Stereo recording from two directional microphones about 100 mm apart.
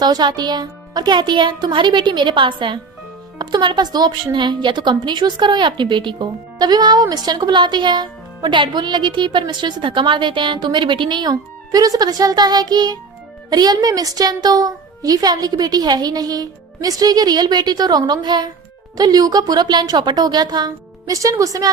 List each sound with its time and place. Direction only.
0.0 s a woman's voice: 45° right (ahead or behind)